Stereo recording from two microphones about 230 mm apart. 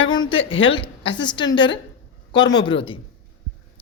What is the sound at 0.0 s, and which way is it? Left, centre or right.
A woman's voice, left.